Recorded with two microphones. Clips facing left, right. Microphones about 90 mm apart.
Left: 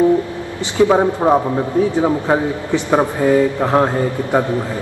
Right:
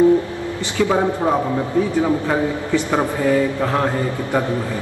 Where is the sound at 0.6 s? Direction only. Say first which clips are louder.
Left 5 dB; 20° left (ahead or behind).